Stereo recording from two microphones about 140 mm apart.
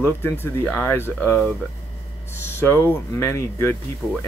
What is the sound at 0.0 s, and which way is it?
A man's voice, 15° left (ahead or behind).